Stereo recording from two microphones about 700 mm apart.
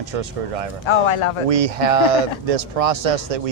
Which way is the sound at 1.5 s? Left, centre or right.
Right.